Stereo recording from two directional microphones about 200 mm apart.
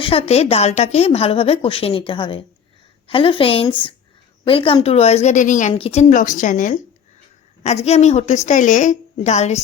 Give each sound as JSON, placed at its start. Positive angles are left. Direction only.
{"t": 0.0, "sound": "a woman's voice", "side_deg": 30}